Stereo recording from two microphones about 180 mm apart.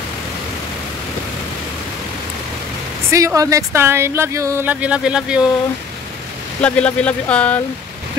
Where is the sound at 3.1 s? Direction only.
15° right (ahead or behind).